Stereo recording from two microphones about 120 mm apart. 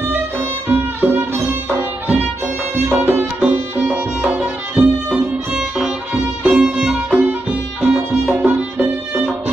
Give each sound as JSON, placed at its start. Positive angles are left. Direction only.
{"t": 0.1, "sound": "music", "side_deg": -20}